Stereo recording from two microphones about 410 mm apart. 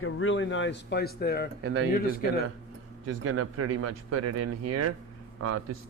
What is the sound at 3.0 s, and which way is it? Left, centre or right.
A man's voice, right.